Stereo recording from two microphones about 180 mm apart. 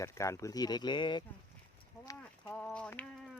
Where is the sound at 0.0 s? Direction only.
15° left (ahead or behind).